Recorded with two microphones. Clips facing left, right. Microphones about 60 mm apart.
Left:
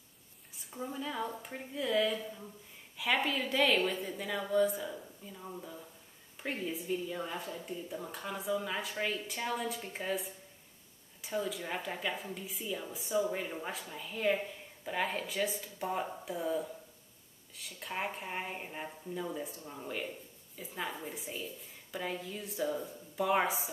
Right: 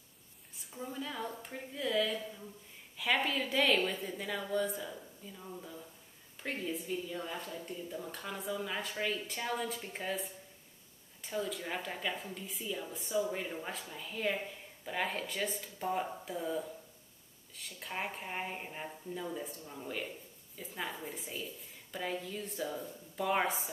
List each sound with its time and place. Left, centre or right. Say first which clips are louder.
0.6 s a woman's voice: left 2 dB; centre